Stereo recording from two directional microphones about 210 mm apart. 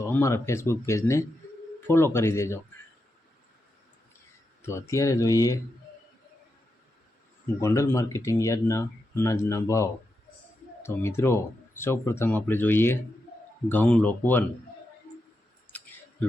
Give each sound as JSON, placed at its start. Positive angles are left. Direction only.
{"t": 0.0, "sound": "speech", "side_deg": 15}
{"t": 4.6, "sound": "speech", "side_deg": 15}
{"t": 7.4, "sound": "speech", "side_deg": 10}